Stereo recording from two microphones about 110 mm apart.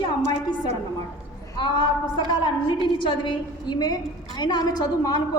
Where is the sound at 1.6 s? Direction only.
45° left (ahead or behind).